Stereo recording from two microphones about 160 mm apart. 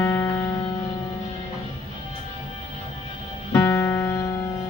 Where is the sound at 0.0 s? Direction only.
15° left (ahead or behind).